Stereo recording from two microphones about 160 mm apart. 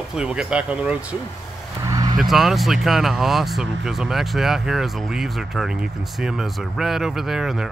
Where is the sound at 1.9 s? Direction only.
25° right (ahead or behind).